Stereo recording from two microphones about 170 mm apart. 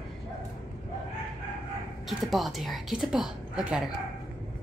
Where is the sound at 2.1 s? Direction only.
Centre (ahead or behind).